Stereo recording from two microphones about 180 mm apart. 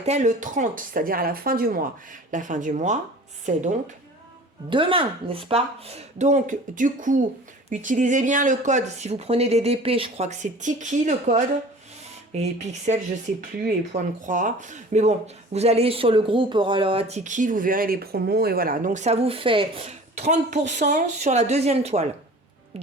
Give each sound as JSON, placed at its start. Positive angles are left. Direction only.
{"t": 0.0, "sound": "speech", "side_deg": -40}
{"t": 4.7, "sound": "speech", "side_deg": -30}